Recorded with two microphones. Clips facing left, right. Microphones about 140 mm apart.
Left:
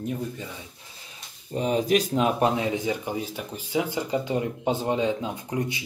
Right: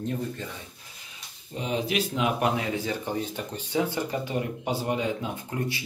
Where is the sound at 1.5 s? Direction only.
40° left (ahead or behind).